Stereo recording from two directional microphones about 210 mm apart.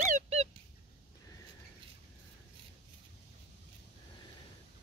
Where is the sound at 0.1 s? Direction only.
30° right (ahead or behind).